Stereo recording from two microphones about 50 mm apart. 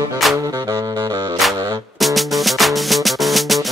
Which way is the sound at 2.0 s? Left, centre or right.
Centre.